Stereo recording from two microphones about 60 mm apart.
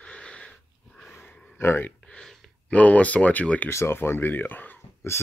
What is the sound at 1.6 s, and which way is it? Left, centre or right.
Speech, left.